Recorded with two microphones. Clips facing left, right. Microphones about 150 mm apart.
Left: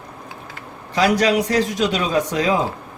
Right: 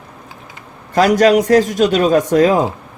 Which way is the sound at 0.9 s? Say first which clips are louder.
Right 6 dB; 45° right (ahead or behind).